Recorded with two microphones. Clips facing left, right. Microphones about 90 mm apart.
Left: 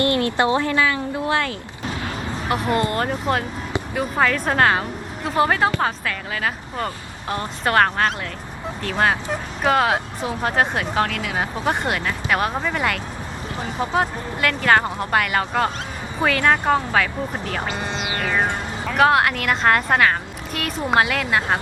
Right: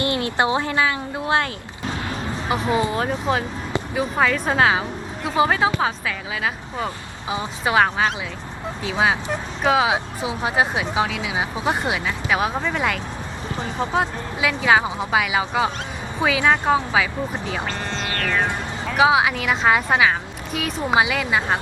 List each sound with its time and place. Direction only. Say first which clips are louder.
0.0 s speech: left 2 dB; 20° right (ahead or behind)
2.5 s speech: even; centre (ahead or behind)
17.7 s music: left 1 dB; 10° left (ahead or behind)
18.9 s speech: even; 5° right (ahead or behind)